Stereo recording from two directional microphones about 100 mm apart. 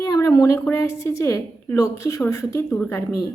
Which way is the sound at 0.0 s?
30° left (ahead or behind).